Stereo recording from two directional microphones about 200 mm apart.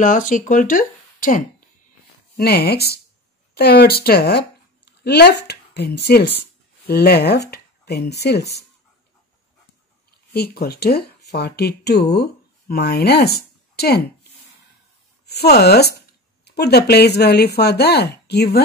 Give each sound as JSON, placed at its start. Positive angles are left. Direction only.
{"t": 0.0, "sound": "speech", "side_deg": 40}
{"t": 10.3, "sound": "speech", "side_deg": 50}
{"t": 15.2, "sound": "speech", "side_deg": 55}